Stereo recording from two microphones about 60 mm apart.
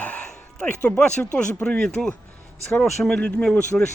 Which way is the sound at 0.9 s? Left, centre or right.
Centre.